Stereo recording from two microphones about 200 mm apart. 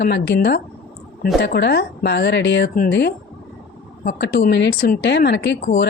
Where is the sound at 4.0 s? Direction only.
45° left (ahead or behind).